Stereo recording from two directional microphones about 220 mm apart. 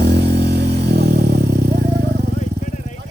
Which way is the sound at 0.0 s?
50° right (ahead or behind).